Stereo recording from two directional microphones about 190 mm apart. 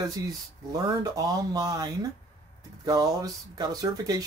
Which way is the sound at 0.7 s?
20° right (ahead or behind).